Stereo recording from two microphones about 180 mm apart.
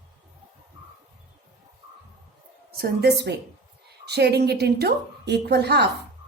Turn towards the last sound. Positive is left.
turn(degrees=-65)  # may be behind; listen again after turning